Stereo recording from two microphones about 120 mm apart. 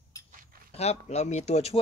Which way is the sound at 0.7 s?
65° left (ahead or behind).